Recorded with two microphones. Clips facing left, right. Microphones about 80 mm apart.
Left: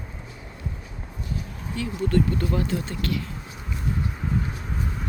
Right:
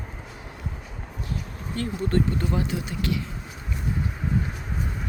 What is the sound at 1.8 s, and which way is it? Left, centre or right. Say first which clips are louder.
Speech: right 1 dB; right.